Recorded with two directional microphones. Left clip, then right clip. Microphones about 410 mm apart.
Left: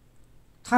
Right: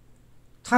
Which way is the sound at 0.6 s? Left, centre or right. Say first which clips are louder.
Right 1 dB; centre.